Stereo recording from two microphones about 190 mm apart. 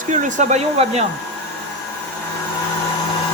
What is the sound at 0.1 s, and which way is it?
Speech, 40° right (ahead or behind).